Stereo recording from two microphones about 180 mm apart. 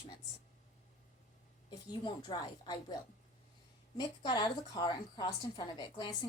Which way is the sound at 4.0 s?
25° left (ahead or behind).